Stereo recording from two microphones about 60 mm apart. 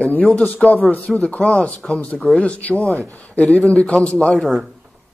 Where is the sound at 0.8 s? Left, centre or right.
Centre.